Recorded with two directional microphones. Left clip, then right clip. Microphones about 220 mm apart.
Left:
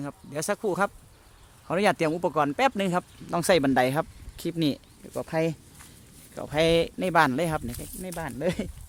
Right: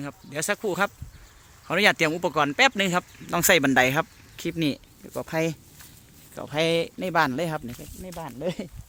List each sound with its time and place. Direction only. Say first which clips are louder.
0.0 s speech: right 1 dB; centre (ahead or behind)